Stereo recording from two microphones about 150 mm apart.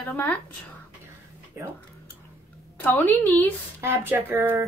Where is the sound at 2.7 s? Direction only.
10° left (ahead or behind).